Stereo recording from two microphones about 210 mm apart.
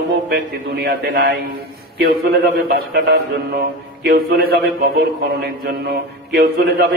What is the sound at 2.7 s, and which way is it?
A man's voice, 50° right (ahead or behind).